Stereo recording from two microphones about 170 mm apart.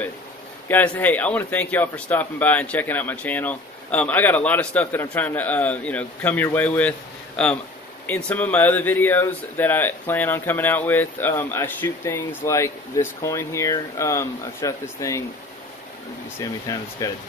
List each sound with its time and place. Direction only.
0.7 s speech: 10° left (ahead or behind)
16.3 s speech: 20° left (ahead or behind)